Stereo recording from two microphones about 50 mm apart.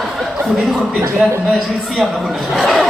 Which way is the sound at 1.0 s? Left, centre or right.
Right.